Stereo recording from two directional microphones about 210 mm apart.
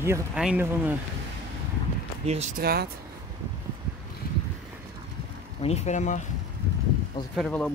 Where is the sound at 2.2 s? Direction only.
30° right (ahead or behind).